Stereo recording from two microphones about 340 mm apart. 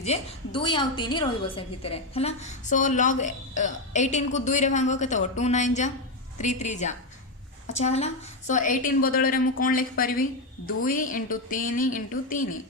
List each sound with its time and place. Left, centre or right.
0.0 s a woman's voice: centre